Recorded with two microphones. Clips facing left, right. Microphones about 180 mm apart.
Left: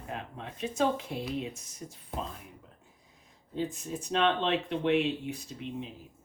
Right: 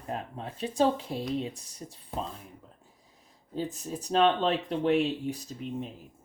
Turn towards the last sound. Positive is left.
turn(degrees=-40)  # may be behind; listen again after turning